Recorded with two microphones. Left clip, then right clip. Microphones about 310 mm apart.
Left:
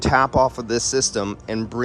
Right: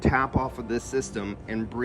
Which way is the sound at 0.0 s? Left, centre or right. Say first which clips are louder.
Left 8 dB; centre.